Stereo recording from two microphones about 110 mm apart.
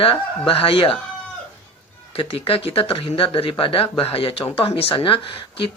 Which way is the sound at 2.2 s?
55° left (ahead or behind).